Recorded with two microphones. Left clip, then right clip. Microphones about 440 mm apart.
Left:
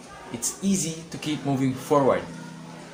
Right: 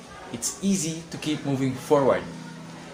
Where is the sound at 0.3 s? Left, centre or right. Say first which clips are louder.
Even; right.